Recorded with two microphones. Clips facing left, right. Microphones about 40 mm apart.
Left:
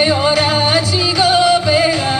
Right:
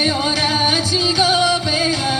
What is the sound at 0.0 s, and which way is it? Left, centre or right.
Music, left.